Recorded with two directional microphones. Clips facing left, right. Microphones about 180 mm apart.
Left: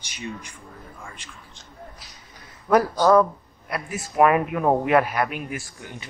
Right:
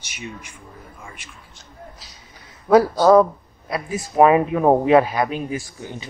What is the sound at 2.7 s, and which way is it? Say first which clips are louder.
Speech: right 4 dB; 10° right (ahead or behind).